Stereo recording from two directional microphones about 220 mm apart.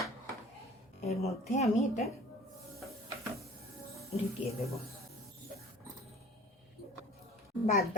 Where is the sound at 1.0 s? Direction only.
30° left (ahead or behind).